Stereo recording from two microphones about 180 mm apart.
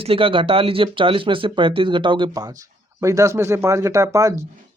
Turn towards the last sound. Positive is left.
turn(degrees=-15)  # may be behind; listen again after turning